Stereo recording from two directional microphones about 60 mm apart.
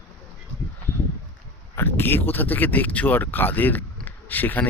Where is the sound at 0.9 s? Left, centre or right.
Left.